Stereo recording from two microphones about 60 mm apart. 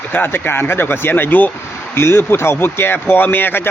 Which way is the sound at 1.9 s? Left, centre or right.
Left.